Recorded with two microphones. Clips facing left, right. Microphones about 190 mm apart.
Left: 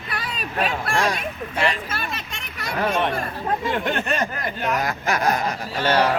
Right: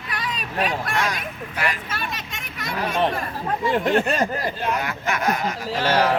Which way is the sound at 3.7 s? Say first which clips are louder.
Right 4 dB; 35° right (ahead or behind).